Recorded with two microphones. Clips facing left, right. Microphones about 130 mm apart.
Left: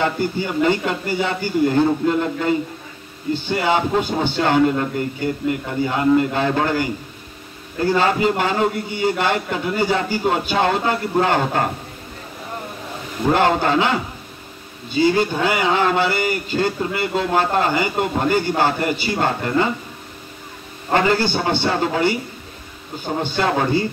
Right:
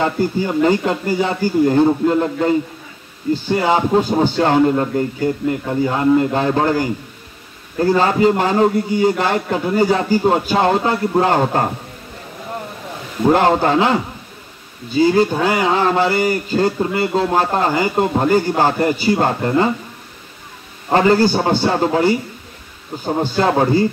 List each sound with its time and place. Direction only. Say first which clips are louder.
0.0 s a man's voice: right 3 dB; 30° right (ahead or behind)
13.3 s a man's voice: right 3 dB; 35° right (ahead or behind)
15.4 s a man's voice: right 2 dB; 35° right (ahead or behind)
20.9 s a man's voice: right 5 dB; 35° right (ahead or behind)
23.4 s a man's voice: right 4 dB; 35° right (ahead or behind)